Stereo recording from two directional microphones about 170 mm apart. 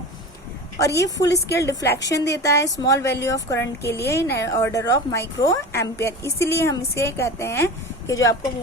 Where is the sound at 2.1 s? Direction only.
90° left.